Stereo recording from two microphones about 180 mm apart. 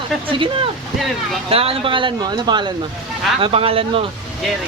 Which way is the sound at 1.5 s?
30° right (ahead or behind).